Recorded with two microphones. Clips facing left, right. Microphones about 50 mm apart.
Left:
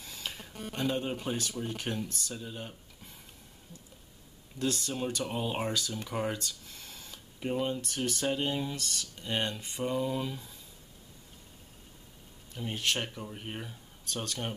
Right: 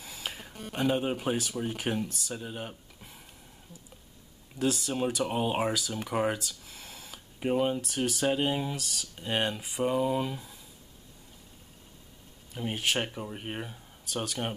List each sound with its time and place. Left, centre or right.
0.0 s a sound: centre
0.7 s speech: centre
4.6 s speech: centre; by 5.6 s right
5.6 s speech: centre
6.4 s a sound: centre
7.3 s speech: centre
8.7 s speech: centre
12.5 s speech: centre
14.2 s speech: centre